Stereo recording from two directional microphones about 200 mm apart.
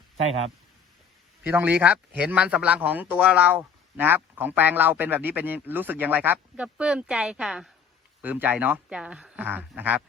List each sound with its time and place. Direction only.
0.2 s speech: 30° right (ahead or behind)
1.5 s speech: 10° right (ahead or behind)